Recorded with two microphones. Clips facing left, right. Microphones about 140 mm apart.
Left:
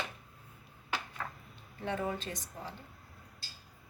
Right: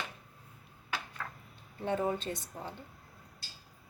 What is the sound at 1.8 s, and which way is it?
Speech, 25° right (ahead or behind).